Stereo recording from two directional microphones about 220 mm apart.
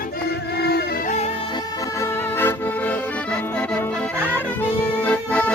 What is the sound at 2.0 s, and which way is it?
Accordion, 10° left (ahead or behind).